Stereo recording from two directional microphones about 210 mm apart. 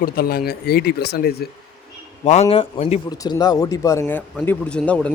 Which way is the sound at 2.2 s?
30° left (ahead or behind).